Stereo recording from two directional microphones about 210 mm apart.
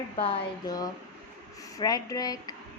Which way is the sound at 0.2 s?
25° left (ahead or behind).